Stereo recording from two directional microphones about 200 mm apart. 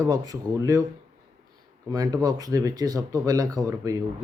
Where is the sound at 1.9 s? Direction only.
20° right (ahead or behind).